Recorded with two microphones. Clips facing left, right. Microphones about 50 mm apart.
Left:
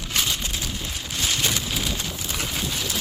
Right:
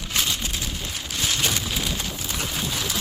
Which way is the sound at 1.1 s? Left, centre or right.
Centre.